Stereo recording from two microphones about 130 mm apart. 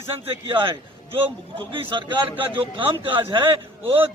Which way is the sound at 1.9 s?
35° right (ahead or behind).